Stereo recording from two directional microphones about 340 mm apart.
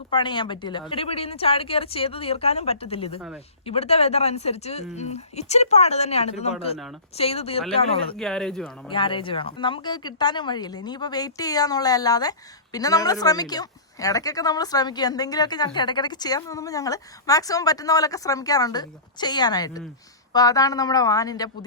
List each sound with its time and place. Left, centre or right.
0.1 s speech: centre
8.1 s speech: centre
8.9 s speech: centre